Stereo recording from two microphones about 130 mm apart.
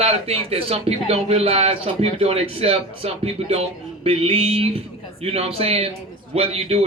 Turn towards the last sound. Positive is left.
turn(degrees=-50)  # may be behind; listen again after turning